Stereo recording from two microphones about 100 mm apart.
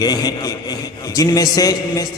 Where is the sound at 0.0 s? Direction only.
40° left (ahead or behind).